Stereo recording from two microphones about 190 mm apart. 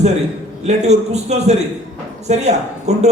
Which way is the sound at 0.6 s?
35° right (ahead or behind).